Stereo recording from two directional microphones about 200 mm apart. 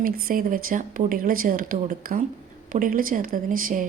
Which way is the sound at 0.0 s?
45° right (ahead or behind).